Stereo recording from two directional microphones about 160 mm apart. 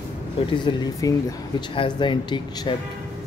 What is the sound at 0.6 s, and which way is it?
Speech, 25° left (ahead or behind).